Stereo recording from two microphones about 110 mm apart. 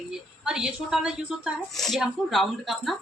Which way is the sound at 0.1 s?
5° right (ahead or behind).